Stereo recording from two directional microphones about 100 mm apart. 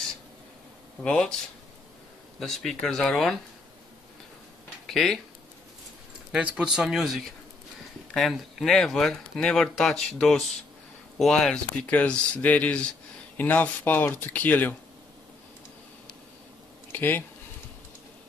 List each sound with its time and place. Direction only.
1.0 s speech: 5° left (ahead or behind)
2.4 s speech: 5° left (ahead or behind)
4.8 s speech: 5° left (ahead or behind)
6.3 s speech: 10° right (ahead or behind); by 14.8 s 20° left (ahead or behind)
16.9 s speech: 20° left (ahead or behind)